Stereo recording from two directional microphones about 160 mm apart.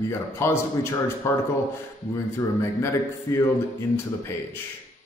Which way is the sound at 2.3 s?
20° left (ahead or behind).